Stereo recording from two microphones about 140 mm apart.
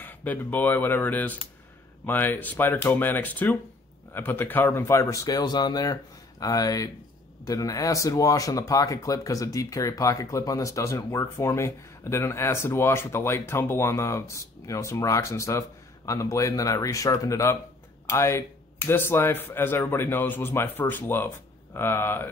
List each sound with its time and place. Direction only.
0.0 s speech: 10° left (ahead or behind)